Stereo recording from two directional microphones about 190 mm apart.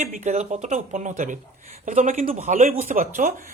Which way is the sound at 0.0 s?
40° right (ahead or behind).